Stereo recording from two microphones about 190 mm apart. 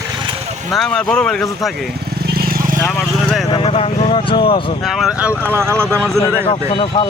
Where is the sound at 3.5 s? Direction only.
30° left (ahead or behind).